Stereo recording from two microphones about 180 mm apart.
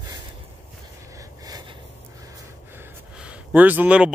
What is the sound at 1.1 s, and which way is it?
Snort, 20° right (ahead or behind).